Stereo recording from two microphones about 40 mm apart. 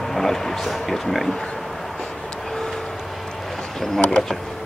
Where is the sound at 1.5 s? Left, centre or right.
Centre.